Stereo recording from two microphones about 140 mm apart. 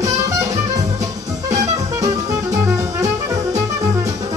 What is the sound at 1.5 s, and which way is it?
Music, 55° right (ahead or behind).